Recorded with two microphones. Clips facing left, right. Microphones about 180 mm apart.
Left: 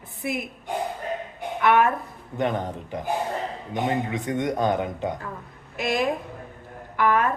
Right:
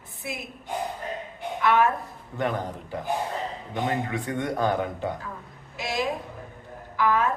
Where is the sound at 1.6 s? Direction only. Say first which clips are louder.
Left 2 dB; 55° left (ahead or behind).